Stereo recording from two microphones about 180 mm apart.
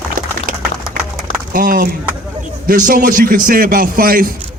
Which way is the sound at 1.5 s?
50° right (ahead or behind).